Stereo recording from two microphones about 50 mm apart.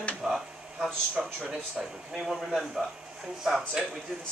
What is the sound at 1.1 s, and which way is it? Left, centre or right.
Speech, centre.